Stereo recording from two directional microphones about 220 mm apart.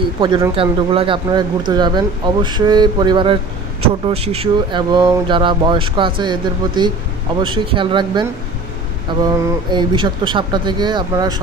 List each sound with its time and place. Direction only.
0.2 s speech: 20° right (ahead or behind)